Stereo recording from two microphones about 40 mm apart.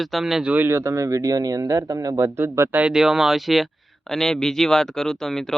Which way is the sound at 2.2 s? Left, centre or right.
Right.